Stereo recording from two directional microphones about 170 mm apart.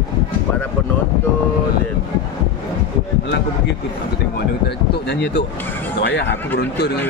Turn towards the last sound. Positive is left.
turn(degrees=85)